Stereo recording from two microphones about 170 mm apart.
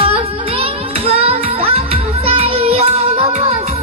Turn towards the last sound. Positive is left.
turn(degrees=-40)  # may be behind; listen again after turning